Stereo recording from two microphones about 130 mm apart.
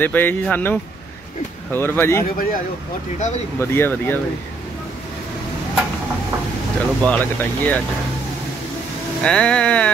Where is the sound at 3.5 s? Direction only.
15° left (ahead or behind).